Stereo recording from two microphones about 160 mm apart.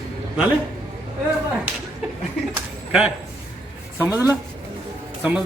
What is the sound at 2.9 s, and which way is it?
A woman's voice, 5° right (ahead or behind).